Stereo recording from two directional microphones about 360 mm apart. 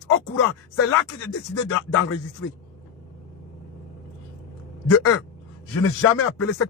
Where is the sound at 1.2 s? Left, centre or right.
Left.